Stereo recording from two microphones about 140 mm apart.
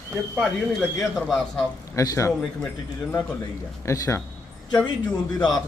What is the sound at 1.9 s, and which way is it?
Speech, 20° left (ahead or behind).